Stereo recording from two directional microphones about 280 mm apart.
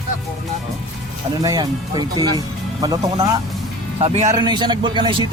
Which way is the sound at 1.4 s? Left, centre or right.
Centre.